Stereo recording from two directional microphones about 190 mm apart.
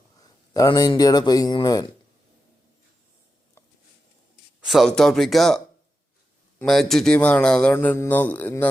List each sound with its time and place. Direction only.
0.2 s speech: 20° left (ahead or behind)
4.6 s speech: centre (ahead or behind)